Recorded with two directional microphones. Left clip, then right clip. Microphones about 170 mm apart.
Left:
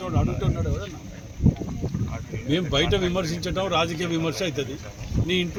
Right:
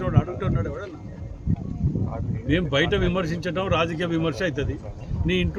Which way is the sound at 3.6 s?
10° right (ahead or behind).